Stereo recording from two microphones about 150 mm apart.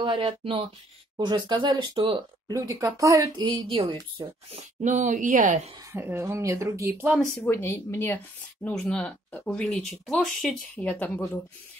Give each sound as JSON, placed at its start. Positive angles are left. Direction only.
{"t": 0.0, "sound": "speech", "side_deg": -30}
{"t": 2.5, "sound": "a woman's voice", "side_deg": -20}
{"t": 5.9, "sound": "speech", "side_deg": -15}
{"t": 7.2, "sound": "speech", "side_deg": 10}